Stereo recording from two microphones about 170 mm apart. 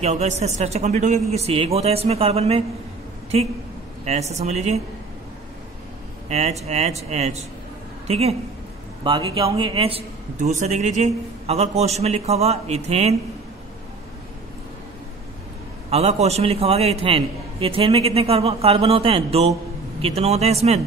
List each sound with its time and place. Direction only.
0.0 s a man's voice: 40° right (ahead or behind)
6.2 s a man's voice: 40° right (ahead or behind)
15.9 s a man's voice: 40° right (ahead or behind)